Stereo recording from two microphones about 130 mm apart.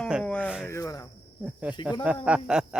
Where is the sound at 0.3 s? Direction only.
10° left (ahead or behind).